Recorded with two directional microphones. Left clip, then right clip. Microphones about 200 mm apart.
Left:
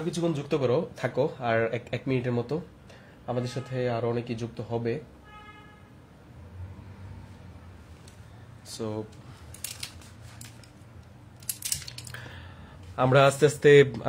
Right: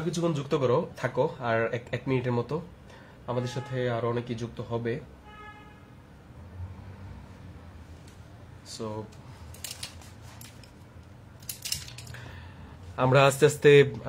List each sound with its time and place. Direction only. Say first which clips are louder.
0.1 s speech: even; 5° left (ahead or behind)
8.6 s speech: left 2 dB; 25° left (ahead or behind)
11.4 s a sound: even; 25° left (ahead or behind)
12.9 s speech: left 1 dB; 10° left (ahead or behind)